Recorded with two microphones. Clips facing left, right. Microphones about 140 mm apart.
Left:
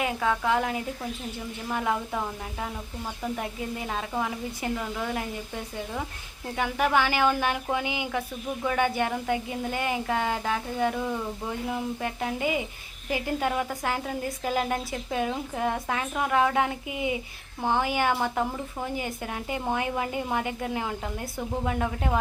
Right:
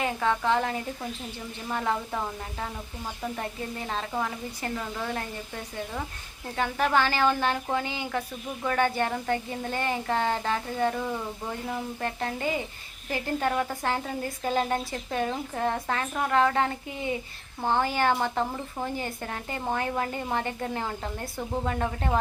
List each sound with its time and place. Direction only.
0.0 s a woman's voice: 5° left (ahead or behind)